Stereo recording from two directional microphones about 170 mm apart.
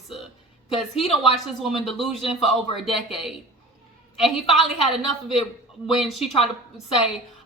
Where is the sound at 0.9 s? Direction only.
35° left (ahead or behind).